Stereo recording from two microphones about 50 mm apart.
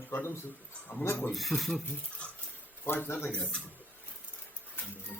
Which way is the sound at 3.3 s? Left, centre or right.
Left.